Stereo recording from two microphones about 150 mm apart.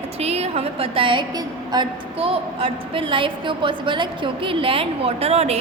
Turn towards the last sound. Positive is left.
turn(degrees=-45)  # may be behind; listen again after turning